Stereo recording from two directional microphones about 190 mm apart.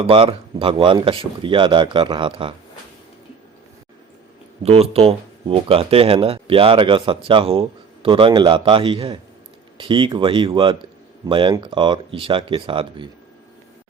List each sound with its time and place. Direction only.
0.0 s speech: 25° right (ahead or behind)
4.6 s speech: 30° right (ahead or behind)